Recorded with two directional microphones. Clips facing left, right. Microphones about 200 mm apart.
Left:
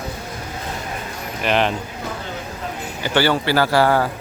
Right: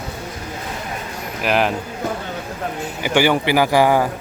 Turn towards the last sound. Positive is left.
turn(degrees=-15)  # may be behind; listen again after turning